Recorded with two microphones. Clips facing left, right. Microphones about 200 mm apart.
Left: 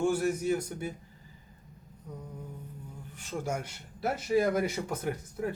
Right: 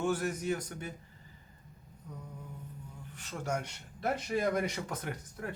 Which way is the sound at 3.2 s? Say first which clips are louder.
Left 2 dB; 10° left (ahead or behind).